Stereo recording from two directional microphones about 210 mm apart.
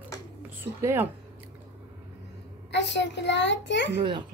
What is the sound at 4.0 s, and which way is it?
Speech, 25° right (ahead or behind).